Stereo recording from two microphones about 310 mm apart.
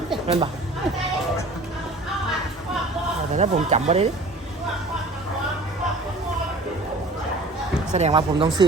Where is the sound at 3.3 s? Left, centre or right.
Right.